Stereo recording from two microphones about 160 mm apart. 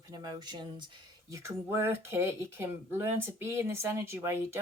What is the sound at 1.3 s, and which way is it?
Speech, 15° right (ahead or behind).